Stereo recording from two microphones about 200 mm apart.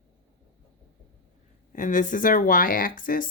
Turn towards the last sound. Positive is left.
turn(degrees=45)  # may be behind; listen again after turning